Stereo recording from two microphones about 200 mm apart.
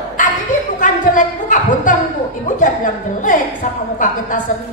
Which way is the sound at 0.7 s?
40° left (ahead or behind).